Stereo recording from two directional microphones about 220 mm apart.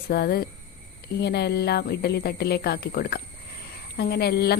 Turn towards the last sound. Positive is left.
turn(degrees=45)  # may be behind; listen again after turning